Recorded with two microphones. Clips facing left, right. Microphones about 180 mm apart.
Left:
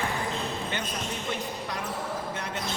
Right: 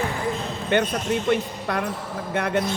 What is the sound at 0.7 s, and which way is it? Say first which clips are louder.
Speech: right 11 dB; 60° right (ahead or behind).